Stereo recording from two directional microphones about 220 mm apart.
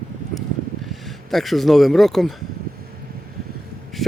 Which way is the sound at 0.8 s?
Centre (ahead or behind).